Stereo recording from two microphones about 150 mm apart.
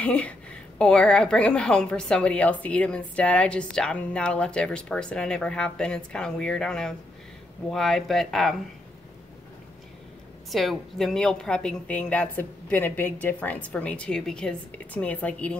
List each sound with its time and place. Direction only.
0.0 s a woman's voice: 10° left (ahead or behind)
10.5 s a woman's voice: centre (ahead or behind)